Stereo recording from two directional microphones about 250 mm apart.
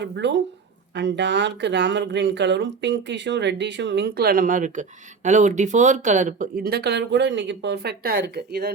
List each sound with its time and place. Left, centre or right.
0.0 s speech: right